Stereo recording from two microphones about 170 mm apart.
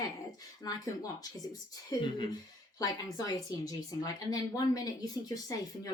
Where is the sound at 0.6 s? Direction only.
20° left (ahead or behind).